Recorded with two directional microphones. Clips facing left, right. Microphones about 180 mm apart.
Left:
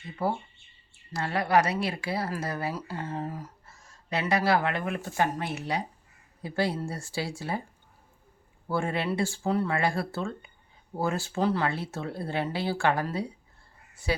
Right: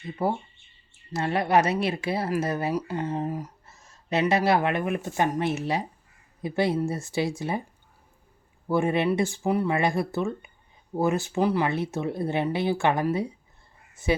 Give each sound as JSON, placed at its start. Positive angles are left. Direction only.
{"t": 0.2, "sound": "a woman's voice", "side_deg": -20}
{"t": 8.6, "sound": "a woman's voice", "side_deg": -20}